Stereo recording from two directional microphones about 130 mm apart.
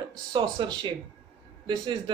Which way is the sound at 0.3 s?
35° right (ahead or behind).